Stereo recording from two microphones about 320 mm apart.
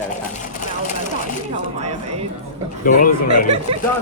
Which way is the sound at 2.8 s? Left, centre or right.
Left.